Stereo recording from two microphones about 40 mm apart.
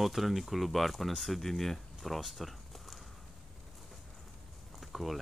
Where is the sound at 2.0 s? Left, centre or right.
Centre.